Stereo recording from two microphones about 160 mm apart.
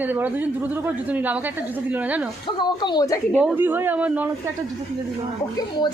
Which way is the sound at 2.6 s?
30° left (ahead or behind).